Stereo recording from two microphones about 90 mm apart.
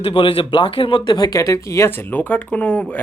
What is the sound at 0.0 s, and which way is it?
Speech, 80° left.